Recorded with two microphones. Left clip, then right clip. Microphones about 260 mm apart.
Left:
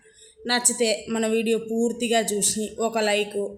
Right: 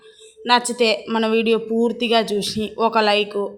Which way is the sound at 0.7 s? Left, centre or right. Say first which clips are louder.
Right 5 dB; centre.